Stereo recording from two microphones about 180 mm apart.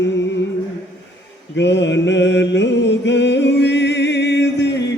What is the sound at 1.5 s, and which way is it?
Mantra, 80° left.